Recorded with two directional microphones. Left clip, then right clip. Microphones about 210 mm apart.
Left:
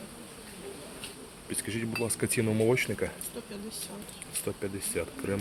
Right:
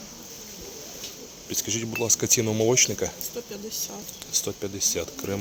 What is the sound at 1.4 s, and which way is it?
Speech, 15° right (ahead or behind).